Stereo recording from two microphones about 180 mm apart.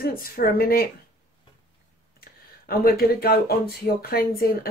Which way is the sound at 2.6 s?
55° left (ahead or behind).